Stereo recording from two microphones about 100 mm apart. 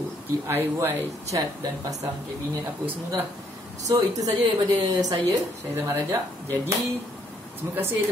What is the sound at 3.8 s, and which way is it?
Speech, 35° right (ahead or behind).